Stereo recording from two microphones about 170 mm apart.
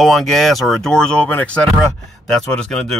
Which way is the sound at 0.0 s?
Centre (ahead or behind).